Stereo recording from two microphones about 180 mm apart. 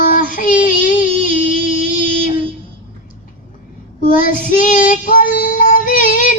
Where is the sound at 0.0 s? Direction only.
45° left (ahead or behind).